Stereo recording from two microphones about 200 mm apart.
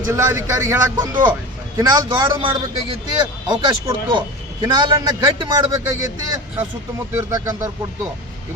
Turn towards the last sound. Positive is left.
turn(degrees=-20)  # may be behind; listen again after turning